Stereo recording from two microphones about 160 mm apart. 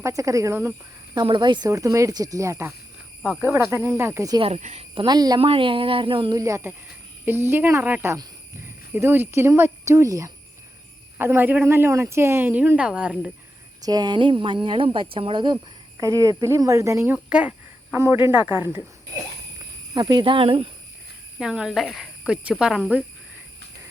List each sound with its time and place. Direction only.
0.0 s speech: 20° right (ahead or behind)
1.1 s speech: 25° right (ahead or behind)
4.4 s speech: 40° right (ahead or behind); by 13.3 s 5° right (ahead or behind)
13.8 s speech: 25° right (ahead or behind)
19.9 s speech: 25° right (ahead or behind)
21.3 s speech: 5° right (ahead or behind)